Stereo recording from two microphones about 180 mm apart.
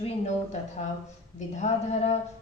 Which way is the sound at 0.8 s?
40° left (ahead or behind).